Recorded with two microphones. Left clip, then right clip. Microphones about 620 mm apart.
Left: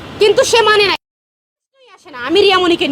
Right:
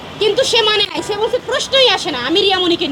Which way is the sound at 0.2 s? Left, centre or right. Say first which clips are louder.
Left 3 dB; left.